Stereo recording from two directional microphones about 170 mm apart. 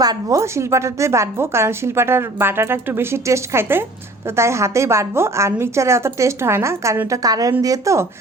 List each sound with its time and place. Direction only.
0.0 s a woman's voice: 20° right (ahead or behind)